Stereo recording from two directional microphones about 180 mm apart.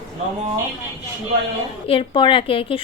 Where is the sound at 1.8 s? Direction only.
30° left (ahead or behind).